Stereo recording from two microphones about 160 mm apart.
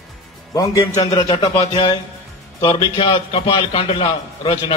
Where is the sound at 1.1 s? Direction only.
40° left (ahead or behind).